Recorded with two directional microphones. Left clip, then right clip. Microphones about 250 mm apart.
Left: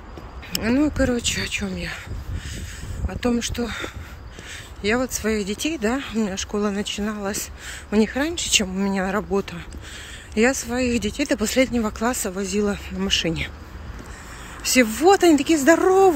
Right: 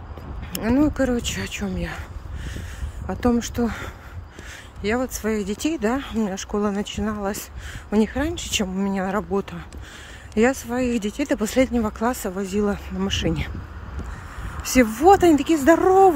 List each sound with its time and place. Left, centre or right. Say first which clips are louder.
0.5 s speech: right 1 dB; centre
3.1 s speech: right 2 dB; centre
14.6 s speech: even; centre